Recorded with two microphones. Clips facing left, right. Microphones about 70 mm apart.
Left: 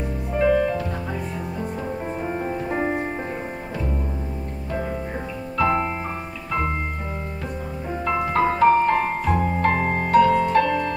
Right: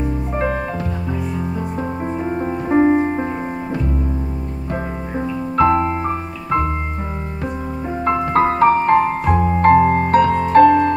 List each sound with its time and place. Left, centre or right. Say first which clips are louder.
0.4 s music: left 4 dB; right
2.2 s music: right 4 dB; right
5.6 s music: right 6 dB; right
8.0 s music: right 5 dB; right